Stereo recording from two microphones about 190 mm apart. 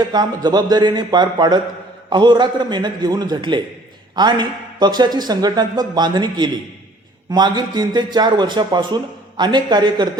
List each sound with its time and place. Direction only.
0.0 s speech: 20° right (ahead or behind)